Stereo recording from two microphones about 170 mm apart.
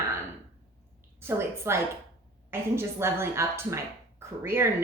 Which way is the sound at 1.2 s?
15° right (ahead or behind).